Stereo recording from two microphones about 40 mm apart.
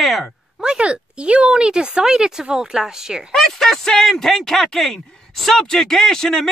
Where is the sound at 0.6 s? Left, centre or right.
Right.